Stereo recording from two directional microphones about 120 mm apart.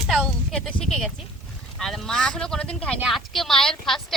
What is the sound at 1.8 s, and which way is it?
Speech, 5° left (ahead or behind).